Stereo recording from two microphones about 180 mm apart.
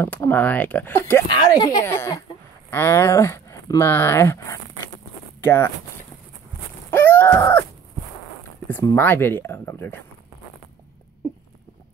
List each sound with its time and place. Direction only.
0.0 s speech: 10° left (ahead or behind)
6.9 s a sound: 10° left (ahead or behind)
8.6 s speech: 10° left (ahead or behind)